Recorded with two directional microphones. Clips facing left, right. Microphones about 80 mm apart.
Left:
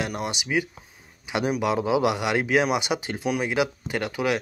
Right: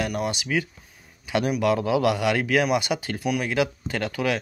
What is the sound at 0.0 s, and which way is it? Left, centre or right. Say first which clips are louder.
Speech: right 2 dB; centre.